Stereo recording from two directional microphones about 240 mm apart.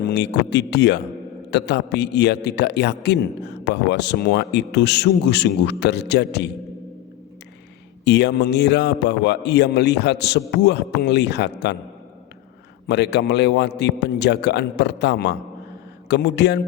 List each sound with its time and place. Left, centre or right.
0.0 s a man's voice: left
8.0 s a man's voice: left
12.9 s a man's voice: left